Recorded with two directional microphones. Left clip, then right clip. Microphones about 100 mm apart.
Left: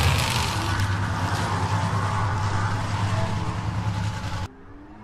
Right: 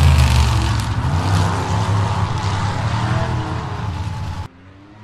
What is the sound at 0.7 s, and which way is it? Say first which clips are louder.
Vehicle: right 3 dB; 40° right (ahead or behind).